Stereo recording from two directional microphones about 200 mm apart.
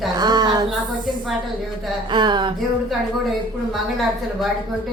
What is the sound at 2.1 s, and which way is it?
Speech, 20° right (ahead or behind).